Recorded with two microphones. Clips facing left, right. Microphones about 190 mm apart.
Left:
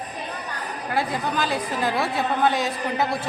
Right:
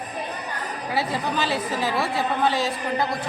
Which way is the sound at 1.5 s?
5° right (ahead or behind).